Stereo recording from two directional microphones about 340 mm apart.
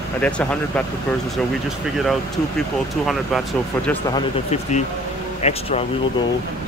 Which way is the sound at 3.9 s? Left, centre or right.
Centre.